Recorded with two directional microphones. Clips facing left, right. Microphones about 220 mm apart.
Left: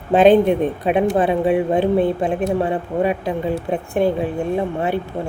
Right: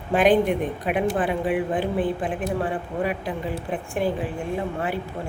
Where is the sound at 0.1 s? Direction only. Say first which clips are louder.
Left 6 dB; 25° left (ahead or behind).